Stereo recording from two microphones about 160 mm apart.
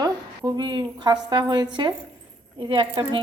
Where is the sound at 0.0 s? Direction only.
25° right (ahead or behind).